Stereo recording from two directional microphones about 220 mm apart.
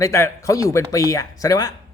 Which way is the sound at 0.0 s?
15° left (ahead or behind).